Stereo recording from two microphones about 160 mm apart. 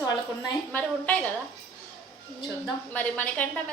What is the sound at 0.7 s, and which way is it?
Speech, 10° left (ahead or behind).